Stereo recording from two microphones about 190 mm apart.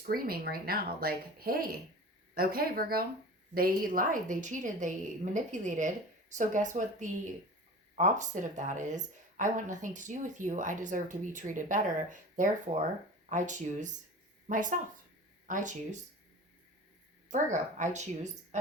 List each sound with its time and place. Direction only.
0.1 s speech: 50° right (ahead or behind)
17.3 s speech: 40° right (ahead or behind)